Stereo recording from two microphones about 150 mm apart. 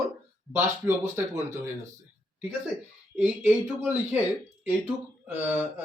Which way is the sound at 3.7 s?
10° right (ahead or behind).